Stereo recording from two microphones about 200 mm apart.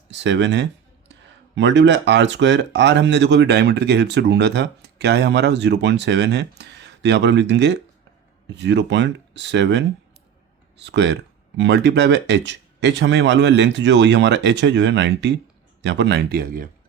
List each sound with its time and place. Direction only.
0.1 s speech: 60° right (ahead or behind)